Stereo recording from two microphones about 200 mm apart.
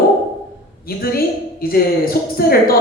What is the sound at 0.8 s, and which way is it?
Speech, 50° left (ahead or behind).